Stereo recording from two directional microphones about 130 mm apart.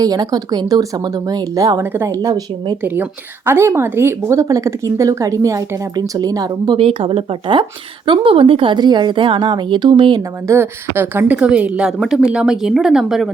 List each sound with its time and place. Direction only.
0.0 s a woman's voice: 30° right (ahead or behind)
2.8 s a woman's voice: 15° right (ahead or behind); by 6.8 s 35° right (ahead or behind)
6.8 s a woman's voice: 50° right (ahead or behind)
10.4 s a woman's voice: 20° right (ahead or behind); by 13.3 s centre (ahead or behind)